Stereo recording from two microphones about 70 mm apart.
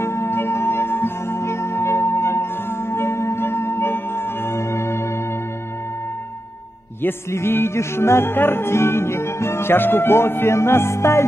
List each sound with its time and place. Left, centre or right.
0.0 s music: left
7.0 s music: left